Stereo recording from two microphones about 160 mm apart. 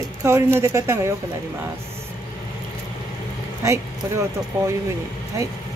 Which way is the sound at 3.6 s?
20° right (ahead or behind).